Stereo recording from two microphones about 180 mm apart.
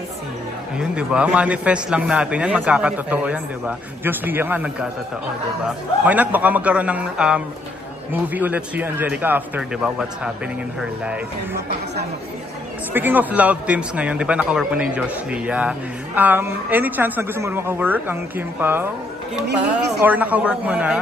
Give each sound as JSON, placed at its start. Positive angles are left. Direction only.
{"t": 0.7, "sound": "a man's voice", "side_deg": -5}
{"t": 6.0, "sound": "a man's voice", "side_deg": -10}
{"t": 12.9, "sound": "a man's voice", "side_deg": -10}
{"t": 20.0, "sound": "a man's voice", "side_deg": -10}